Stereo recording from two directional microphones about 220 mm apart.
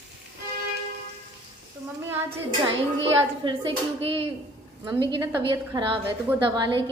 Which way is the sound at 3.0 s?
20° right (ahead or behind).